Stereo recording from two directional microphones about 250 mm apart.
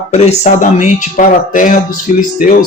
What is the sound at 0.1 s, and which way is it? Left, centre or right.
Speech, left.